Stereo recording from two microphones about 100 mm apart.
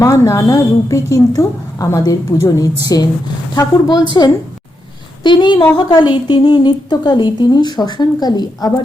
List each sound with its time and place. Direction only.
0.0 s a woman's voice: 30° left (ahead or behind)
5.2 s a woman's voice: 50° left (ahead or behind)